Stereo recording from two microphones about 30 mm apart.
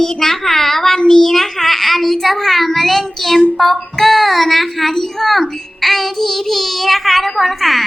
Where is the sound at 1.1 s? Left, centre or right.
Centre.